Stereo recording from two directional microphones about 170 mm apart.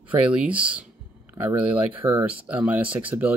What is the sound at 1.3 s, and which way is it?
Speech, 10° right (ahead or behind).